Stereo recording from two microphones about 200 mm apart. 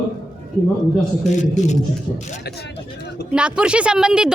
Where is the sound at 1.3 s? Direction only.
35° left (ahead or behind).